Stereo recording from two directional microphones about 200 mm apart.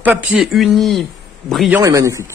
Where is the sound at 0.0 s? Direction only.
Centre (ahead or behind).